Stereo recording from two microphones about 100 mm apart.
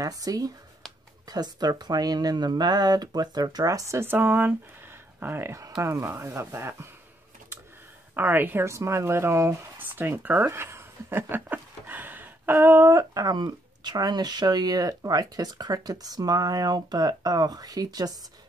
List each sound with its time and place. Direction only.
0.0 s speech: 40° right (ahead or behind)
8.1 s speech: 20° right (ahead or behind); by 18.1 s 40° right (ahead or behind)